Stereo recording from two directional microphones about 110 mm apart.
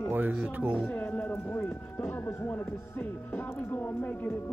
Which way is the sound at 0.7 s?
15° left (ahead or behind).